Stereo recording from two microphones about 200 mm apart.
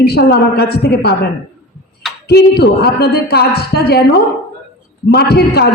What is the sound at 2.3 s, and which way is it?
A man's voice, 55° left (ahead or behind).